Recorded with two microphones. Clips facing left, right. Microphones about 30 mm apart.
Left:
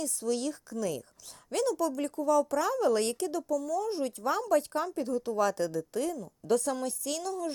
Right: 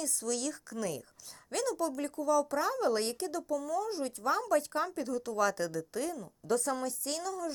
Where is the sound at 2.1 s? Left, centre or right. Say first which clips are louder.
Left 3 dB; left.